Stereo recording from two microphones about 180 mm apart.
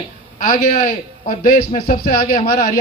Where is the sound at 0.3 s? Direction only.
45° left (ahead or behind).